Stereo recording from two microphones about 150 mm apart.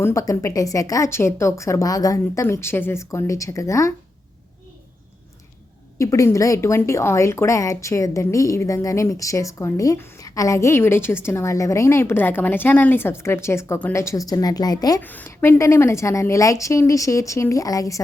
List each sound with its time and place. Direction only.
0.0 s a woman's voice: 20° left (ahead or behind)
6.0 s a woman's voice: 20° left (ahead or behind)
15.0 s a woman's voice: 10° left (ahead or behind)